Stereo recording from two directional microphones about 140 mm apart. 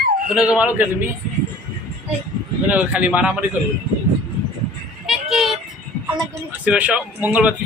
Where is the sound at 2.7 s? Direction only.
10° right (ahead or behind).